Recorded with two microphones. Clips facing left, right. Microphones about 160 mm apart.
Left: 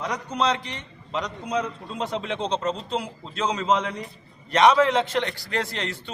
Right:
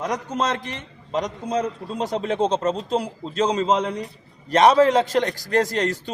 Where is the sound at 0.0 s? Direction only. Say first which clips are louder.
Right 1 dB; 45° right (ahead or behind).